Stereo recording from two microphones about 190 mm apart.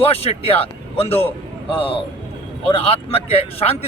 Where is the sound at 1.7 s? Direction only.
30° left (ahead or behind).